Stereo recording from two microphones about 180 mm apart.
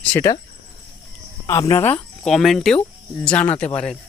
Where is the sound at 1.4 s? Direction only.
20° left (ahead or behind).